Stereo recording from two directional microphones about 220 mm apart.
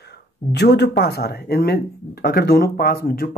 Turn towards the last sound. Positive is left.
turn(degrees=40)  # may be behind; listen again after turning